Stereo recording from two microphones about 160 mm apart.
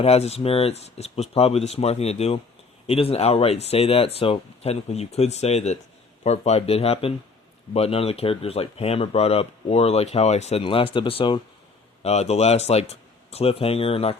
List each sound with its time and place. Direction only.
0.0 s speech: 40° left (ahead or behind)